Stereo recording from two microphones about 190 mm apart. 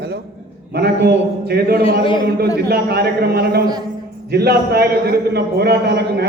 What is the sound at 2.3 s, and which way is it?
A man's voice, 55° right (ahead or behind).